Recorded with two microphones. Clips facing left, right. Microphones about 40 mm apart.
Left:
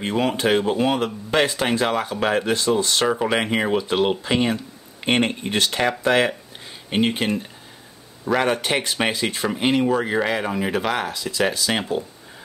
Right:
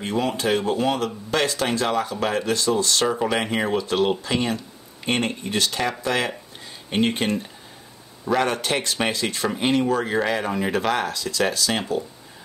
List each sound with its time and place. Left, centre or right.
0.0 s speech: left
5.0 s speech: left
6.9 s speech: centre